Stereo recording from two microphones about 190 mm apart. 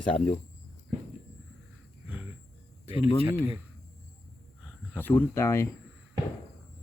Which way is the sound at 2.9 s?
30° left (ahead or behind).